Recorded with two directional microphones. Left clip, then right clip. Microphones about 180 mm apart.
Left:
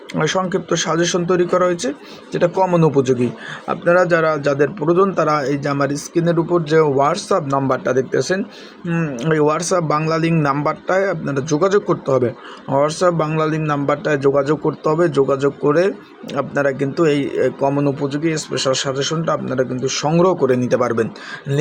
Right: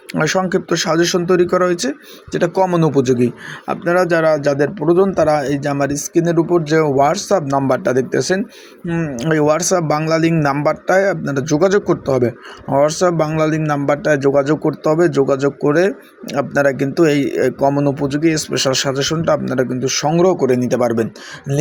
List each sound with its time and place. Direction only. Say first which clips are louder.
0.1 s a man's voice: right 2 dB; 30° right (ahead or behind)